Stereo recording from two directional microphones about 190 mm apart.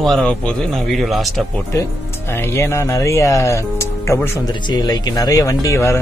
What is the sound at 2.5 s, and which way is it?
Speech, 15° left (ahead or behind).